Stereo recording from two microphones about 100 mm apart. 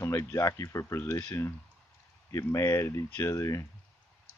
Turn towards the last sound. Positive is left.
turn(degrees=30)  # may be behind; listen again after turning